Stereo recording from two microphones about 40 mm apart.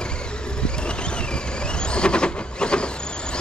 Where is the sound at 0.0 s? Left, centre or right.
Left.